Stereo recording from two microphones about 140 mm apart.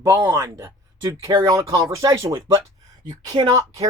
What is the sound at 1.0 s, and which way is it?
Speech, 30° right (ahead or behind).